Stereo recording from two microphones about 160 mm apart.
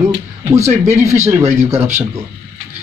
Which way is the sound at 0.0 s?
15° right (ahead or behind).